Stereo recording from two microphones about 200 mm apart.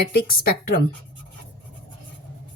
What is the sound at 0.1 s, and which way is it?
Speech, 50° left (ahead or behind).